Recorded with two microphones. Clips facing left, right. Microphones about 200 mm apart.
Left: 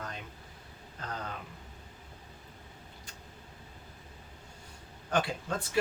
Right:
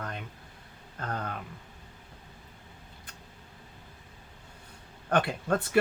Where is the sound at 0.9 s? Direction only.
50° right (ahead or behind).